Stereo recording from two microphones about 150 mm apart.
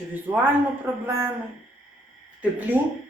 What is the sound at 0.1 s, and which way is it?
Speech, 10° right (ahead or behind).